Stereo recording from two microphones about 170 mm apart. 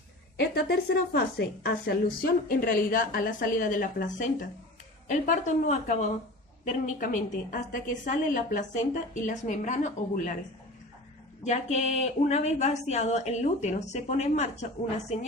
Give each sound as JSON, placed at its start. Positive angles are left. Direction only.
{"t": 0.3, "sound": "a woman's voice", "side_deg": 70}
{"t": 11.4, "sound": "a woman's voice", "side_deg": 45}